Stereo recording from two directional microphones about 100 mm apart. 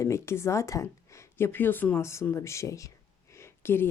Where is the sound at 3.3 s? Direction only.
25° left (ahead or behind).